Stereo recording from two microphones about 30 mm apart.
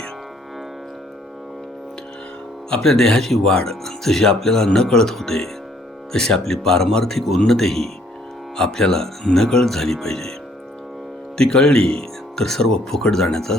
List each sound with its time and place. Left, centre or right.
2.8 s speech: centre
11.3 s speech: left